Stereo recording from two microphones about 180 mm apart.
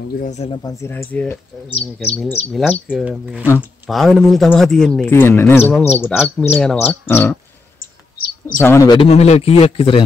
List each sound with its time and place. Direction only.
0.2 s a man's voice: 35° left (ahead or behind)
0.6 s a man's voice: 20° left (ahead or behind)
8.5 s speech: 15° left (ahead or behind)
8.8 s a man's voice: 30° left (ahead or behind)